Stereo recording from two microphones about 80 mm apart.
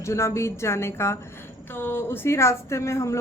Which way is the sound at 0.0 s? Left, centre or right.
Left.